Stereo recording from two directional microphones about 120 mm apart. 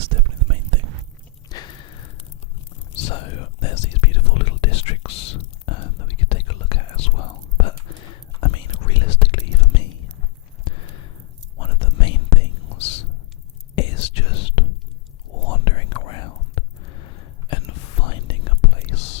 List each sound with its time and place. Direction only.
0.0 s whispering: 45° right (ahead or behind)
1.5 s a sound: 35° left (ahead or behind)
2.9 s whispering: 55° left (ahead or behind)
10.7 s a sound: 45° left (ahead or behind)
11.6 s whispering: 45° left (ahead or behind)
17.7 s whispering: 55° left (ahead or behind)